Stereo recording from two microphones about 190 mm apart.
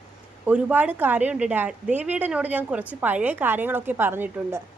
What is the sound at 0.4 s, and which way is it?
A woman's voice, 10° right (ahead or behind).